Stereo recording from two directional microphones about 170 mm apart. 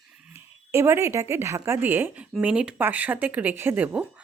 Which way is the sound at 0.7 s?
15° right (ahead or behind).